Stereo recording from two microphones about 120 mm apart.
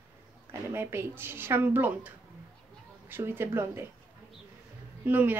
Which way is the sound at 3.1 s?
20° right (ahead or behind).